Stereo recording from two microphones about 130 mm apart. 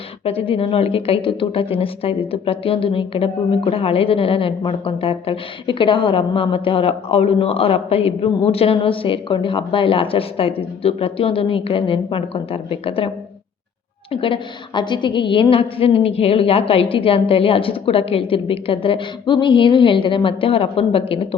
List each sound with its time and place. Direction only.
0.3 s a woman's voice: 45° left (ahead or behind)
14.1 s a woman's voice: 40° left (ahead or behind)